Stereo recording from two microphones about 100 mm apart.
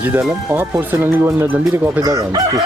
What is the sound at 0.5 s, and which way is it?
Speech, 20° right (ahead or behind).